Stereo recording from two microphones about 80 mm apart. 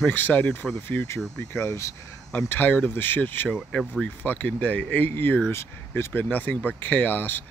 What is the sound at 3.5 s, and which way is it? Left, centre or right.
Speech, centre.